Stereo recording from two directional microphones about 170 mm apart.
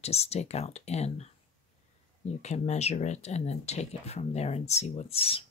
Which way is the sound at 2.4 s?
40° left (ahead or behind).